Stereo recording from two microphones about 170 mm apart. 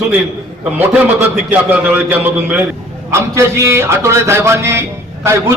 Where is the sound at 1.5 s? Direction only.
10° right (ahead or behind).